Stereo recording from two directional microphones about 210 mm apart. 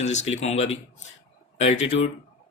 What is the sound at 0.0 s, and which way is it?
Speech, 35° left (ahead or behind).